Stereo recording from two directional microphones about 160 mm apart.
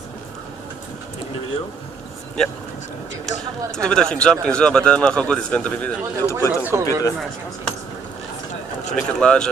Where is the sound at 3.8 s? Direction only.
5° left (ahead or behind).